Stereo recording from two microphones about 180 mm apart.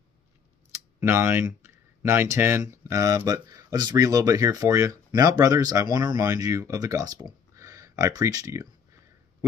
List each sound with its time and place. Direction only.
1.0 s speech: 15° right (ahead or behind)